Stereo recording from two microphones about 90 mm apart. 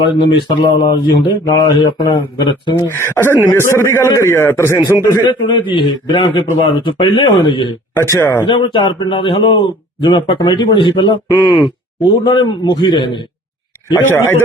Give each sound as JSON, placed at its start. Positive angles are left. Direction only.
{"t": 0.3, "sound": "speech", "side_deg": 70}
{"t": 2.7, "sound": "a man's voice", "side_deg": 25}
{"t": 5.2, "sound": "speech", "side_deg": 60}
{"t": 7.9, "sound": "speech", "side_deg": 30}
{"t": 8.4, "sound": "speech", "side_deg": 70}
{"t": 11.1, "sound": "speech", "side_deg": 50}
{"t": 12.0, "sound": "speech", "side_deg": 65}
{"t": 14.1, "sound": "a man's voice", "side_deg": 25}